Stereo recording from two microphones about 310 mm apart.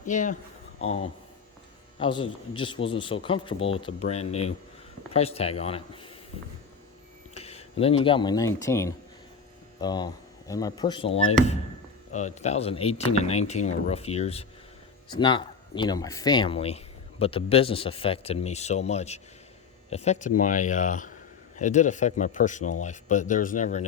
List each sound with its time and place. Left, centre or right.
0.0 s speech: left
2.0 s speech: centre
7.3 s speech: centre